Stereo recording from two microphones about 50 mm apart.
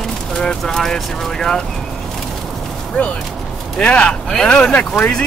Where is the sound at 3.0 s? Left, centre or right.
Left.